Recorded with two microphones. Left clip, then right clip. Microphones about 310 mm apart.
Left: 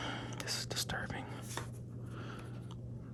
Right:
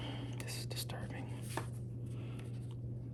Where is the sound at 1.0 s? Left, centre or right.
Left.